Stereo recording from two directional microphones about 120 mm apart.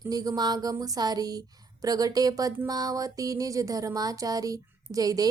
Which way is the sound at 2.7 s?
30° right (ahead or behind).